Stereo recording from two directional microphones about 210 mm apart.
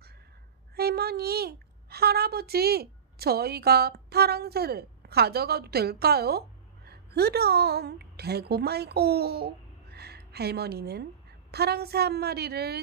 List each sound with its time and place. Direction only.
0.7 s a woman's voice: 50° right (ahead or behind)